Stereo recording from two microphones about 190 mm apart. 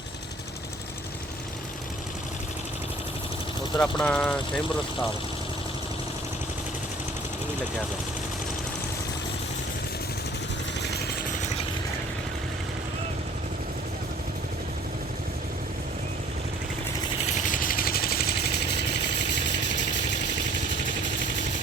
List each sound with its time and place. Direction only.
3.8 s speech: 5° left (ahead or behind)
11.3 s vehicle: 40° left (ahead or behind)
17.3 s vehicle: 45° left (ahead or behind); by 19.7 s 65° left (ahead or behind)